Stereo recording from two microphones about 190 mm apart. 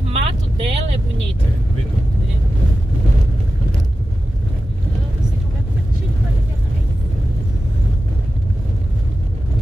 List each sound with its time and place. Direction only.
0.1 s vehicle: 30° right (ahead or behind)